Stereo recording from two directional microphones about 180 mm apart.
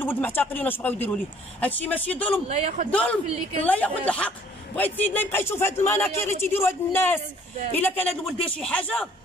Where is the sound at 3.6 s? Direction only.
10° left (ahead or behind).